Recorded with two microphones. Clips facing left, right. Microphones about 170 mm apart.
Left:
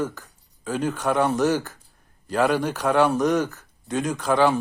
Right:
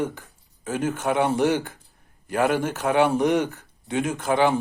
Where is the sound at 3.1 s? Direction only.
25° right (ahead or behind).